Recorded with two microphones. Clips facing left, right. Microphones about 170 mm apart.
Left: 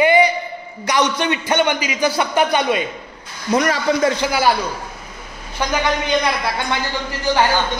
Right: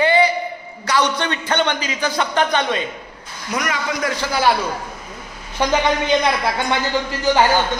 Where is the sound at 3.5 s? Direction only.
30° left (ahead or behind).